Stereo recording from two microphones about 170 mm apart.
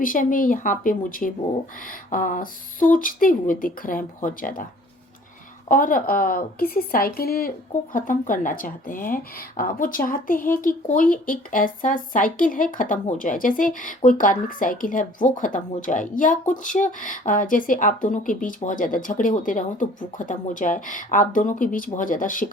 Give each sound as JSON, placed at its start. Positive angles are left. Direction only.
{"t": 0.0, "sound": "speech", "side_deg": 55}
{"t": 5.6, "sound": "a woman's voice", "side_deg": 50}